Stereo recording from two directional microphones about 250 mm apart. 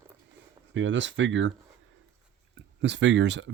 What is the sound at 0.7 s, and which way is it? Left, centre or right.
Speech, right.